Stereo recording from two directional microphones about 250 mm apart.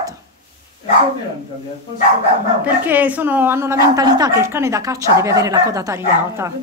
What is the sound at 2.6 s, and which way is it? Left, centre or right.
A woman's voice, centre.